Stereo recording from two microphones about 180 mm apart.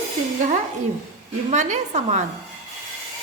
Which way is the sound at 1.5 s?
40° right (ahead or behind).